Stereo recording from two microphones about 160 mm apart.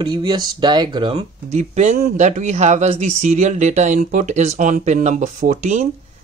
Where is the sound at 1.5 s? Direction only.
45° right (ahead or behind).